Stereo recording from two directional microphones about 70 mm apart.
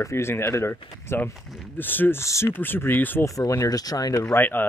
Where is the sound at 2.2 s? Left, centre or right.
Left.